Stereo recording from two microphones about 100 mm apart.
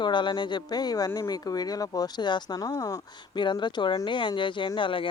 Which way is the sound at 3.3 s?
50° left (ahead or behind).